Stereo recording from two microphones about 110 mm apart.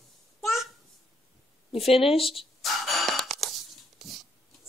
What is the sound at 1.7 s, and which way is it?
Speech, 60° left (ahead or behind).